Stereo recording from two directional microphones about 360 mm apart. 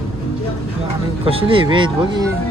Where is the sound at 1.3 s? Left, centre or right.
Centre.